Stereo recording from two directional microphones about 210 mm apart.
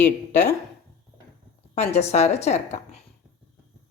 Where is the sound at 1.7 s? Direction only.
30° left (ahead or behind).